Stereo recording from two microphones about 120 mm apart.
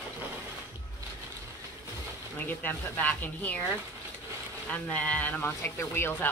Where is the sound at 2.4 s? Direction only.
15° left (ahead or behind).